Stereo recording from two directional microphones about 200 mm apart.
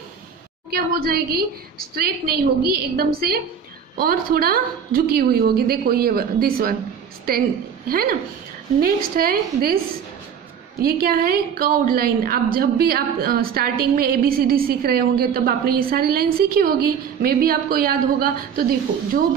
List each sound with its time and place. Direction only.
0.7 s a woman's voice: 50° right (ahead or behind)
10.8 s a woman's voice: 50° right (ahead or behind)